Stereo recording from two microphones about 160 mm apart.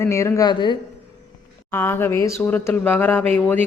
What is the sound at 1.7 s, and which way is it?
Speech, 15° left (ahead or behind).